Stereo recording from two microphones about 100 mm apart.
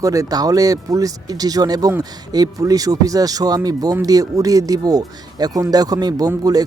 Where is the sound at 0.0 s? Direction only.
35° right (ahead or behind).